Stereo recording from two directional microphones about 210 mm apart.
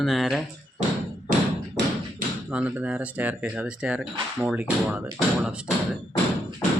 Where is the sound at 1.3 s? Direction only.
40° right (ahead or behind).